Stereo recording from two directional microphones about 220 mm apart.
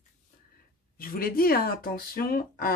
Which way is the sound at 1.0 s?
40° left (ahead or behind).